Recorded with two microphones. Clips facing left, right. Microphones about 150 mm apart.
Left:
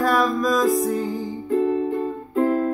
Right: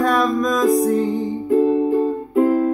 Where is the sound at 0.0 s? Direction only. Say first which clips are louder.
Right 2 dB; 5° left (ahead or behind).